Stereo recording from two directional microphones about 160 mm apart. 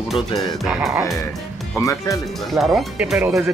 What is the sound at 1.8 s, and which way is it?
Speech, 20° left (ahead or behind).